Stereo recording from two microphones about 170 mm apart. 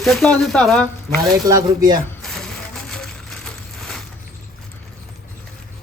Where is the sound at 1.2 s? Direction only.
20° right (ahead or behind).